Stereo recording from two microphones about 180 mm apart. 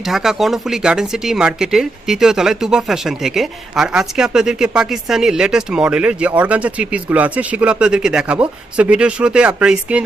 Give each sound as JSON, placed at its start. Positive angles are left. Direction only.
{"t": 0.1, "sound": "speech", "side_deg": 0}